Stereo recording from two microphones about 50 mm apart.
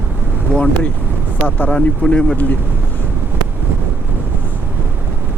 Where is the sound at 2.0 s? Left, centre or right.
Centre.